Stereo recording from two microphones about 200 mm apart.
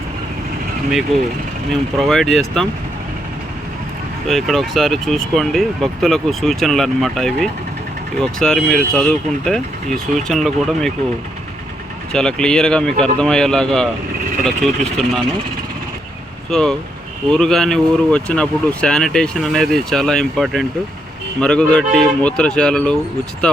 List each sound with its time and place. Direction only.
1.1 s speech: 30° right (ahead or behind)
1.7 s speech: centre (ahead or behind)
4.3 s speech: centre (ahead or behind)
12.1 s speech: 5° left (ahead or behind)
16.5 s speech: 5° left (ahead or behind)